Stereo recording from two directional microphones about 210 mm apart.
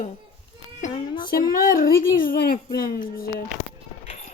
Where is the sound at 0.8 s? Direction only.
35° left (ahead or behind).